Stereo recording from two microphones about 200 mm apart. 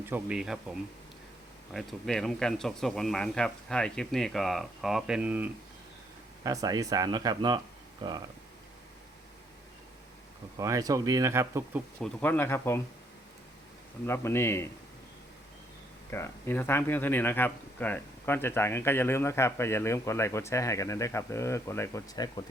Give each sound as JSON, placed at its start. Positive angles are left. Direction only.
{"t": 0.0, "sound": "speech", "side_deg": -5}
{"t": 1.7, "sound": "speech", "side_deg": 0}
{"t": 10.6, "sound": "speech", "side_deg": -15}
{"t": 11.9, "sound": "speech", "side_deg": 10}
{"t": 14.1, "sound": "speech", "side_deg": 15}
{"t": 16.0, "sound": "speech", "side_deg": 15}